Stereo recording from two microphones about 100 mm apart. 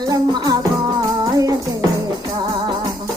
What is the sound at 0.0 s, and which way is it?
Music, 40° right (ahead or behind).